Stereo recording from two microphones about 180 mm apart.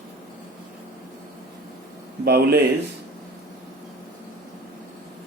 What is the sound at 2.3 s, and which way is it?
Speech, 60° right (ahead or behind).